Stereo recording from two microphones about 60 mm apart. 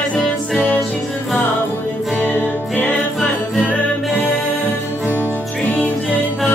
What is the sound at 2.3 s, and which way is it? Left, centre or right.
Music, left.